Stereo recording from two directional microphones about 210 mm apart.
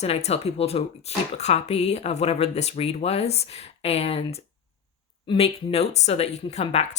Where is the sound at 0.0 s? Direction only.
30° left (ahead or behind).